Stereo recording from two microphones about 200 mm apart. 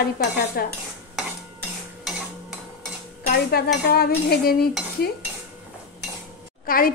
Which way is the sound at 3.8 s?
50° left (ahead or behind).